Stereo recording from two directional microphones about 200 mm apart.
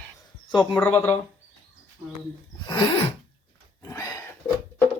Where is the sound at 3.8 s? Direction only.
15° left (ahead or behind).